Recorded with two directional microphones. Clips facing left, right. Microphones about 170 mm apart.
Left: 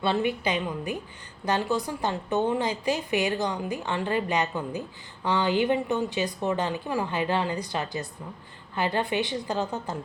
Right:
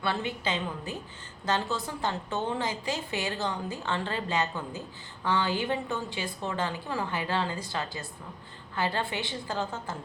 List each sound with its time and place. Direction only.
0.0 s a woman's voice: 20° left (ahead or behind)